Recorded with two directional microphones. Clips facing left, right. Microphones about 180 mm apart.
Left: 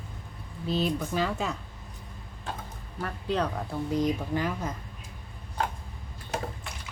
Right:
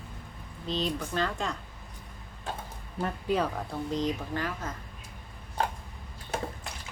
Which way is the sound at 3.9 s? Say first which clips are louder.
Left 4 dB; 10° left (ahead or behind).